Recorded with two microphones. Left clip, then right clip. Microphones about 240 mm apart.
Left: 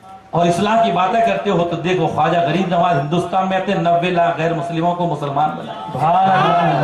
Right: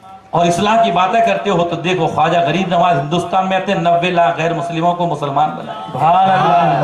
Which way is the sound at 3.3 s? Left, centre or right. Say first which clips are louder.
Right 3 dB; centre.